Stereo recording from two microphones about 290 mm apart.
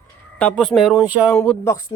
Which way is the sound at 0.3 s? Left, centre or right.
Centre.